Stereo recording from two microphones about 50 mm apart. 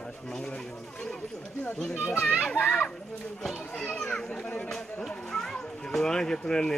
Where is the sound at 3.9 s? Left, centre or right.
Centre.